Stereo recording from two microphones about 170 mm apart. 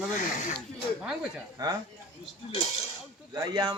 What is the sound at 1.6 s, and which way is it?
Speech, 20° right (ahead or behind).